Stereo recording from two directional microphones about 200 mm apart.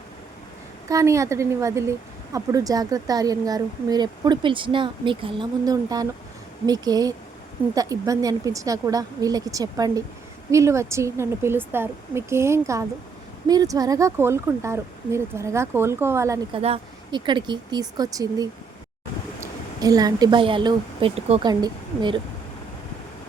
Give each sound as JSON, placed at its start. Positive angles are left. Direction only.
{"t": 0.9, "sound": "speech", "side_deg": -15}
{"t": 16.6, "sound": "speech", "side_deg": -30}
{"t": 19.8, "sound": "speech", "side_deg": -20}